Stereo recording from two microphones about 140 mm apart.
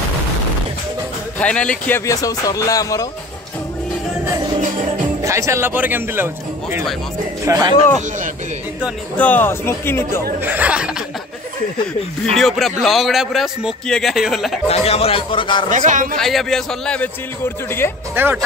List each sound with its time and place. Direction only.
1.4 s speech: 10° left (ahead or behind); by 3.1 s 25° left (ahead or behind)
5.2 s a man's voice: 20° right (ahead or behind)
9.1 s speech: 10° left (ahead or behind)
10.4 s a man's voice: 10° right (ahead or behind)
12.4 s a man's voice: centre (ahead or behind)
14.7 s a man's voice: 45° left (ahead or behind)
15.7 s a man's voice: 65° right (ahead or behind)
16.2 s a man's voice: centre (ahead or behind)
17.6 s speech: 15° left (ahead or behind)
18.1 s speech: 15° right (ahead or behind)